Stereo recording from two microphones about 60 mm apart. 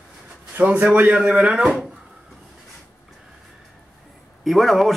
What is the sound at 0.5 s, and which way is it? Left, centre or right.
Speech, right.